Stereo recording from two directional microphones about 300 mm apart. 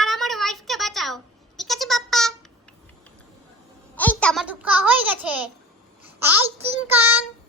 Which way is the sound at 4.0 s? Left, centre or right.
Centre.